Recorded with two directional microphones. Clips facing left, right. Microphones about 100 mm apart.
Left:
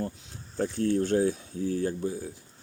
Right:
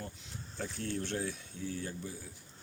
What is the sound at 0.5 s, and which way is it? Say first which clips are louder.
Speech: left 12 dB; 45° left (ahead or behind).